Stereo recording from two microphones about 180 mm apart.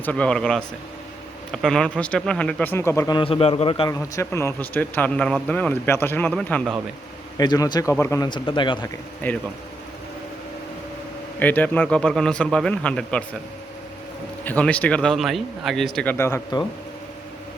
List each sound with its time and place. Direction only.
0.0 s a man's voice: 5° left (ahead or behind)
1.6 s speech: 5° left (ahead or behind); by 3.9 s 30° left (ahead or behind)
3.9 s speech: 15° left (ahead or behind)
7.3 s a man's voice: 20° left (ahead or behind)
9.2 s speech: 10° left (ahead or behind)
11.3 s a man's voice: 10° left (ahead or behind)
14.4 s speech: 10° left (ahead or behind)